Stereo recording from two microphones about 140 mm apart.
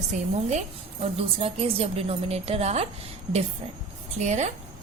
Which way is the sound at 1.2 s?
45° right (ahead or behind).